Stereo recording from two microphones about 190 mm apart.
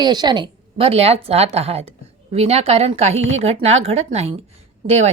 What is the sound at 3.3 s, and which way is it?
Speech, 35° right (ahead or behind).